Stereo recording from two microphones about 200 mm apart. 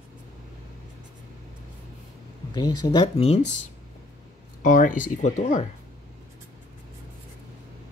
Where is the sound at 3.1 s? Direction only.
30° left (ahead or behind).